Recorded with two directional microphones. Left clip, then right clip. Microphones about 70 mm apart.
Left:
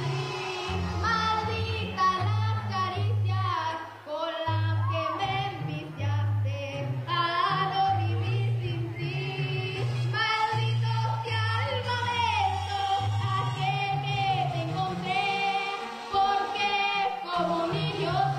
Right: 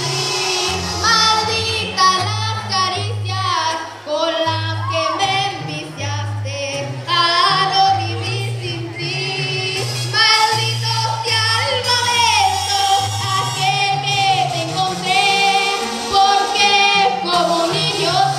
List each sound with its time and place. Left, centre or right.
0.0 s music: centre
7.1 s music: left
9.4 s music: left